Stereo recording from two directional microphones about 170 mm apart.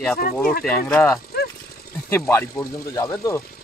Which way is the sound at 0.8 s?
5° left (ahead or behind).